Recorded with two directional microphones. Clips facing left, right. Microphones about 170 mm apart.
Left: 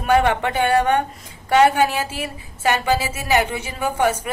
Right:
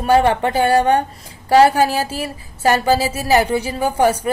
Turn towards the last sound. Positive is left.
turn(degrees=-35)  # may be behind; listen again after turning